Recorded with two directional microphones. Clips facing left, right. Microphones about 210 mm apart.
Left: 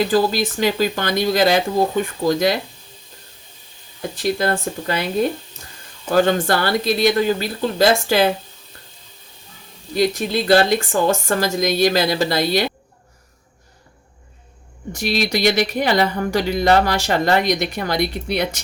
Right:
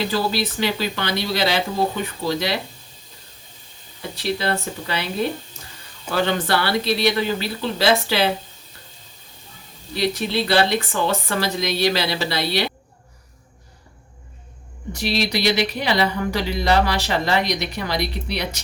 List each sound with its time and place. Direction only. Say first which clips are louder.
0.1 s speech: left 5 dB; 45° left (ahead or behind)
4.1 s speech: left 3 dB; 45° left (ahead or behind)
6.1 s speech: left 5 dB; 45° left (ahead or behind)
9.9 s speech: left 3 dB; 45° left (ahead or behind)
14.9 s speech: left 2 dB; 50° left (ahead or behind)